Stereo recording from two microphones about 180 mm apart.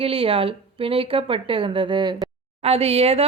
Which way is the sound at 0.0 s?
30° right (ahead or behind).